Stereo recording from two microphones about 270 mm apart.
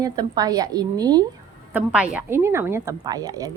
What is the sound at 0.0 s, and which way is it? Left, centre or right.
A woman's voice, centre.